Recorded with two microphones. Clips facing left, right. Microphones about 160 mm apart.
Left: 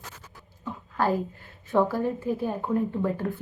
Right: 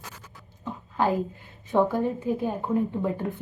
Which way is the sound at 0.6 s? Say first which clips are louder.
Right 1 dB; 20° right (ahead or behind).